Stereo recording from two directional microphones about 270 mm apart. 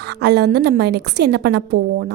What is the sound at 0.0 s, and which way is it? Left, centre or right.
A woman's voice, right.